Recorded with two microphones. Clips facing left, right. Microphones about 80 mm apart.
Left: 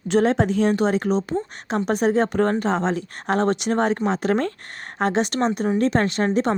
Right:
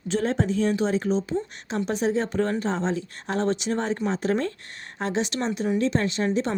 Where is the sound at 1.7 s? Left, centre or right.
Left.